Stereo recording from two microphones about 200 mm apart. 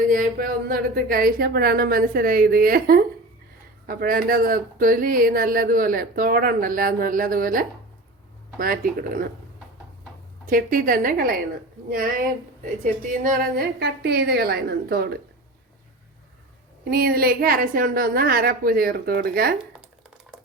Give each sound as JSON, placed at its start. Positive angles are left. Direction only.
{"t": 0.1, "sound": "speech", "side_deg": -45}
{"t": 10.4, "sound": "speech", "side_deg": -45}
{"t": 16.9, "sound": "speech", "side_deg": -50}